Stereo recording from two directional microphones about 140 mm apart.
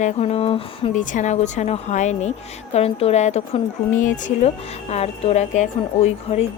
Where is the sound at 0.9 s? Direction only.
65° left (ahead or behind).